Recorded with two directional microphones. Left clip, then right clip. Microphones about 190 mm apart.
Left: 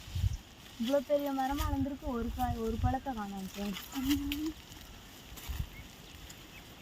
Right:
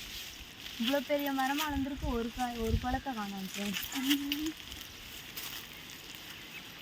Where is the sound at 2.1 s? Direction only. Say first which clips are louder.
Right 2 dB; 5° right (ahead or behind).